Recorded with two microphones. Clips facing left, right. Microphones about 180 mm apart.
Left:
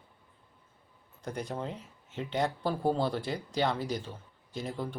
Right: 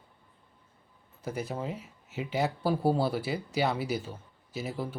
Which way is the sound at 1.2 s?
5° right (ahead or behind).